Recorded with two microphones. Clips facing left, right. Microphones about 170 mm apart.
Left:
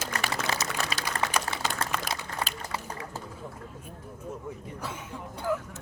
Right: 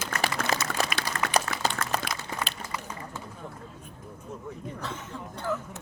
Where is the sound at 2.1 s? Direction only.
40° left (ahead or behind).